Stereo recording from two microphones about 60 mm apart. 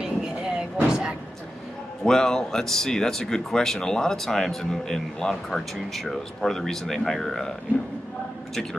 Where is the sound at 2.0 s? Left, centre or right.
Centre.